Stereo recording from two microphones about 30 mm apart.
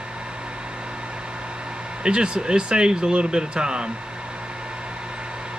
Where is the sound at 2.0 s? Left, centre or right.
Right.